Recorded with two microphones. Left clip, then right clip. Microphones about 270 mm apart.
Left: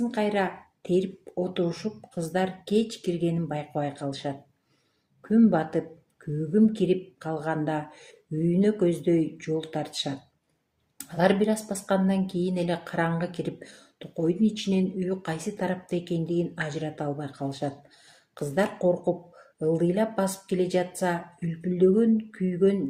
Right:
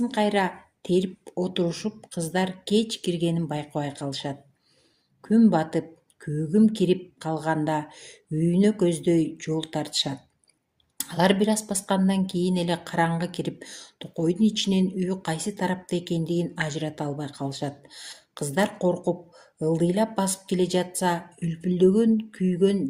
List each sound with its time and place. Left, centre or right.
0.1 s speech: right
5.3 s speech: right